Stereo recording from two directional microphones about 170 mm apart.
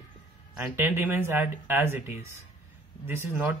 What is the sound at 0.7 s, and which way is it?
Speech, 10° right (ahead or behind).